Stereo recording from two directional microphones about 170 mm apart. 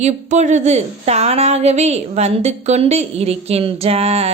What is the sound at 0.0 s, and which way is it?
A woman's voice, 45° right (ahead or behind).